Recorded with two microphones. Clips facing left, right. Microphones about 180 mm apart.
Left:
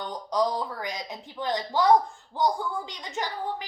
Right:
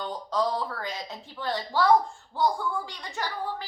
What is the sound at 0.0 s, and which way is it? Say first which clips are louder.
A woman's voice: left 1 dB; 15° left (ahead or behind).